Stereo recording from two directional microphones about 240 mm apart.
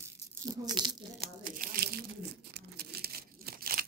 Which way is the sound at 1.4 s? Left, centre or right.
Right.